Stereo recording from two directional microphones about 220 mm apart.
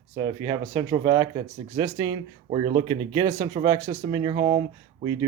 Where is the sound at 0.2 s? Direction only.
20° right (ahead or behind).